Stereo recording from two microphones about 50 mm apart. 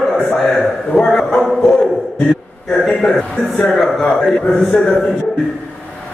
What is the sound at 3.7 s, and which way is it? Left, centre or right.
Speech, centre.